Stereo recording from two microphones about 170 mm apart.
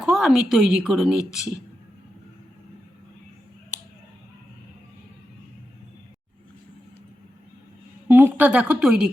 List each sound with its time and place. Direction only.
0.0 s a woman's voice: centre (ahead or behind)
3.7 s a sound: 50° right (ahead or behind)
8.0 s a woman's voice: 10° right (ahead or behind)